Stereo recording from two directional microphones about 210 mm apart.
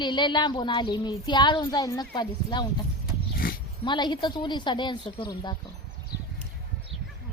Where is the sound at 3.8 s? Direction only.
20° left (ahead or behind).